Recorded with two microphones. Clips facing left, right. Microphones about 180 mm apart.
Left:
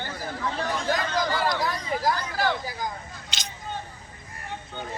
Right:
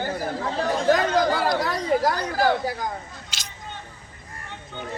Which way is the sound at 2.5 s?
65° right (ahead or behind).